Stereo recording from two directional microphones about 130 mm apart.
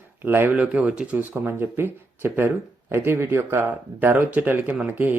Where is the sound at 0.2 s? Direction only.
15° right (ahead or behind).